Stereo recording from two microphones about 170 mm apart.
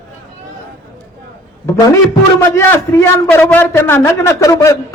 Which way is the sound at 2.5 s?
15° left (ahead or behind).